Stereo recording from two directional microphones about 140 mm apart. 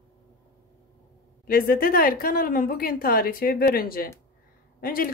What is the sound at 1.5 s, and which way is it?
Speech, 90° left.